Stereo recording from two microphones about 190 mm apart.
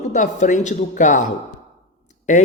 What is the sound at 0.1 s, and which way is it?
Speech, 40° left (ahead or behind).